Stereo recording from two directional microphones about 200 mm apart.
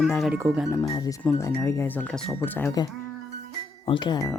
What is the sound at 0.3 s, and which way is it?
Speech, 15° right (ahead or behind).